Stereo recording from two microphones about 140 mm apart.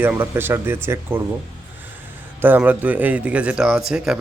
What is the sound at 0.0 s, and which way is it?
Speech, 15° right (ahead or behind).